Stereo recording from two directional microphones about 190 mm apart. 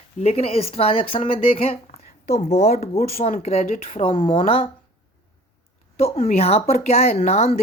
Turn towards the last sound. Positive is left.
turn(degrees=35)  # may be behind; listen again after turning